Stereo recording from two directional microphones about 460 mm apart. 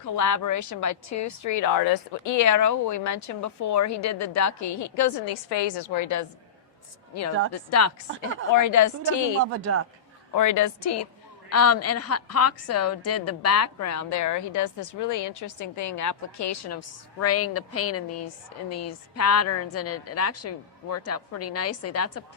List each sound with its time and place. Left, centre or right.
0.0 s a woman's voice: left
5.3 s a woman's voice: left
7.5 s a woman's voice: left
9.5 s speech: right
10.3 s a woman's voice: left